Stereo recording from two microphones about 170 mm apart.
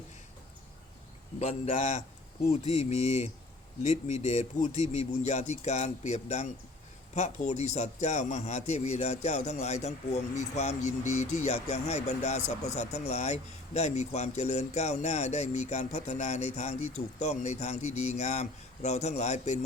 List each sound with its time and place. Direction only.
1.4 s speech: 40° left (ahead or behind)